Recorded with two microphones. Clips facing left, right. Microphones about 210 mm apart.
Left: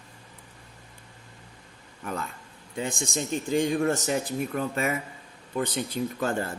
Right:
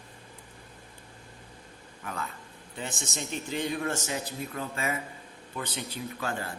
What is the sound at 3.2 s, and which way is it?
Speech, 45° left (ahead or behind).